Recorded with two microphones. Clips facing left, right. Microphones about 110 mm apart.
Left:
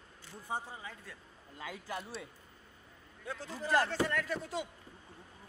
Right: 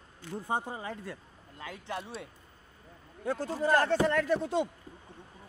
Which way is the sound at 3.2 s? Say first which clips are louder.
Right 9 dB; 50° right (ahead or behind).